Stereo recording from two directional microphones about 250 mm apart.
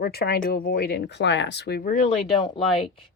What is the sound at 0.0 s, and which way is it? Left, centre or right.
Speech, left.